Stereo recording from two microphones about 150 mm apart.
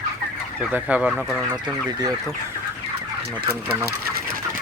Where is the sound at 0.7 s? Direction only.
10° right (ahead or behind).